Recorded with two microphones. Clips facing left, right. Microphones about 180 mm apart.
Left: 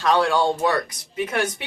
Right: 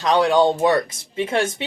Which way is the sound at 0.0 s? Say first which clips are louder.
Right 3 dB; 20° right (ahead or behind).